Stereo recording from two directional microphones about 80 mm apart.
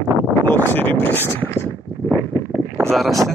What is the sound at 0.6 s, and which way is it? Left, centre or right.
Speech, left.